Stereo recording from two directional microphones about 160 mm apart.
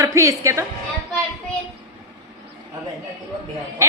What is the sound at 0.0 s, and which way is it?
Speech, 20° right (ahead or behind).